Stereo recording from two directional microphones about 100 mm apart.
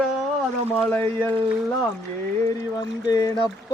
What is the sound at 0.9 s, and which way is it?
Speech, 20° left (ahead or behind).